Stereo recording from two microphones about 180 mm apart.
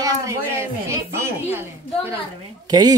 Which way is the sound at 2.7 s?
20° right (ahead or behind).